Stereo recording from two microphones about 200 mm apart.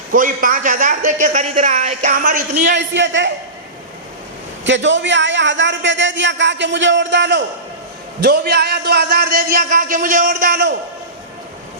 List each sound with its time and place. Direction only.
0.1 s a man's voice: 45° right (ahead or behind)
2.7 s a man's voice: 65° right (ahead or behind)
4.6 s a man's voice: 65° right (ahead or behind); by 10.7 s 45° right (ahead or behind)